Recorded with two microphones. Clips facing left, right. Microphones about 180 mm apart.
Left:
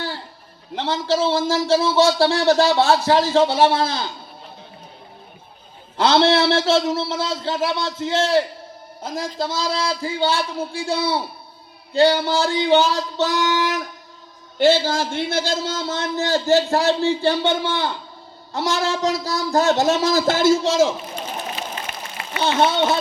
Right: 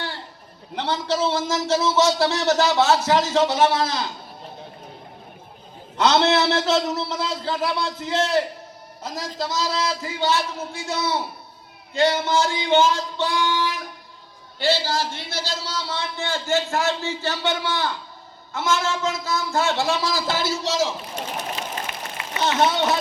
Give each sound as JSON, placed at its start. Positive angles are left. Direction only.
{"t": 0.8, "sound": "a man's voice", "side_deg": 25}
{"t": 6.0, "sound": "a man's voice", "side_deg": 30}
{"t": 22.4, "sound": "a man's voice", "side_deg": 30}